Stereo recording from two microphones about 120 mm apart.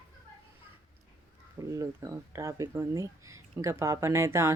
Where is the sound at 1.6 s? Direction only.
25° right (ahead or behind).